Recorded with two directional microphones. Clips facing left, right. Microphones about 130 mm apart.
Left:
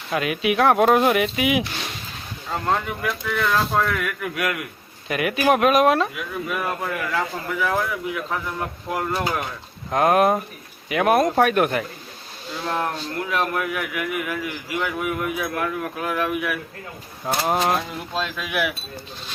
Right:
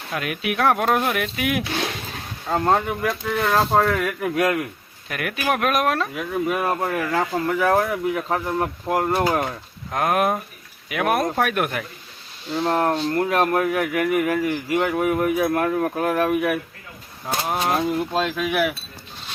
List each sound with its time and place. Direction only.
0.1 s speech: centre (ahead or behind)
1.7 s speech: 60° right (ahead or behind); by 4.5 s 35° right (ahead or behind)
5.0 s speech: 5° left (ahead or behind)
6.1 s speech: 35° right (ahead or behind)
9.9 s speech: centre (ahead or behind)
12.6 s speech: 40° right (ahead or behind)
17.2 s speech: 15° left (ahead or behind)
17.7 s speech: 45° right (ahead or behind)